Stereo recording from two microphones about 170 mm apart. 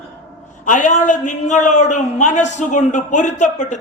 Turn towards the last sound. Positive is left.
turn(degrees=45)  # may be behind; listen again after turning